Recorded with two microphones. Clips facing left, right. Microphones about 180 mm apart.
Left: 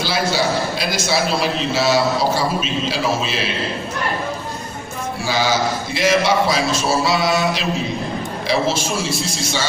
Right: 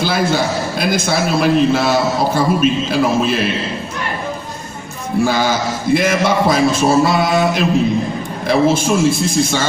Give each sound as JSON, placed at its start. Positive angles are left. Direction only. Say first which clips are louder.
{"t": 0.0, "sound": "a man's voice", "louder": "right 3 dB", "side_deg": -50}
{"t": 5.2, "sound": "a man's voice", "louder": "right 3 dB", "side_deg": -50}